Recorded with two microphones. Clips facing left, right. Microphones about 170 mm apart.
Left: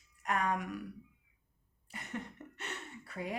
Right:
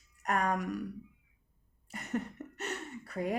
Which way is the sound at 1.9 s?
45° right (ahead or behind).